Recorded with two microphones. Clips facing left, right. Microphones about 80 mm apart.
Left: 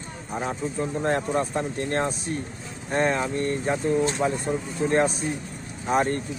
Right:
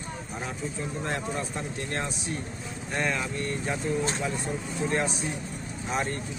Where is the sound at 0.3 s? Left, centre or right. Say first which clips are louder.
Left 8 dB; left.